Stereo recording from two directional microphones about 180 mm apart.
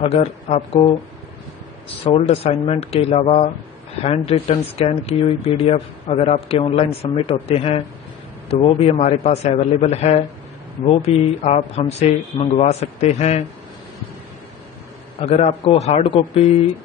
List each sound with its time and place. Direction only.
0.0 s speech: 35° left (ahead or behind)
2.0 s speech: 35° left (ahead or behind)
15.1 s speech: 35° left (ahead or behind)